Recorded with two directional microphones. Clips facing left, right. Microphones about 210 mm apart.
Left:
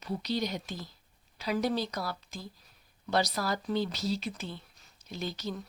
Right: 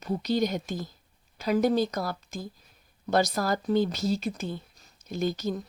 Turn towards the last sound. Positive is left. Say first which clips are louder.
# right 8 dB
turn(degrees=-45)  # may be behind; listen again after turning